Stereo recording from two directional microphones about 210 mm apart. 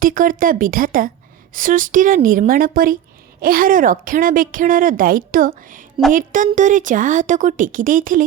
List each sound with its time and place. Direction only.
0.0 s a woman's voice: 40° right (ahead or behind)